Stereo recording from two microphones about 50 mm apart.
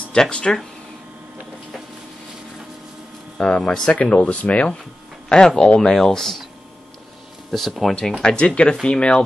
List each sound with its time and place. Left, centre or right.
0.1 s speech: centre
3.3 s speech: left
5.3 s speech: centre
7.9 s speech: centre